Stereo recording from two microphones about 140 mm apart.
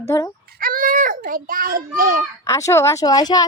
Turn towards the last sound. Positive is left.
turn(degrees=25)  # may be behind; listen again after turning